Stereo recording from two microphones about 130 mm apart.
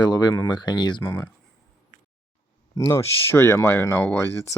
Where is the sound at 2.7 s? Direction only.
20° left (ahead or behind).